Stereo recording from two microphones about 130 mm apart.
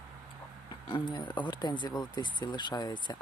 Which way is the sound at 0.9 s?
35° left (ahead or behind).